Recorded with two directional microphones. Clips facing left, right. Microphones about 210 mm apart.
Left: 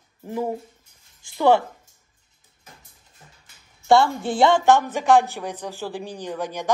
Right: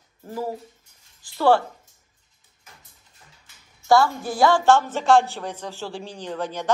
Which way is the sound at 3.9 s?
25° left (ahead or behind).